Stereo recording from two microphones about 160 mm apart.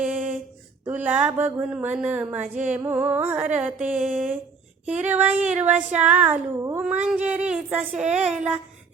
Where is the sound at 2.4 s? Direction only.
50° right (ahead or behind).